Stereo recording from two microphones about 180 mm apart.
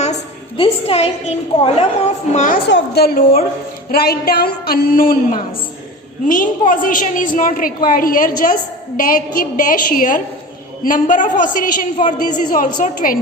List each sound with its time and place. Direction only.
0.0 s a woman's voice: 35° left (ahead or behind)
2.6 s a woman's voice: 70° left (ahead or behind); by 13.1 s 50° left (ahead or behind)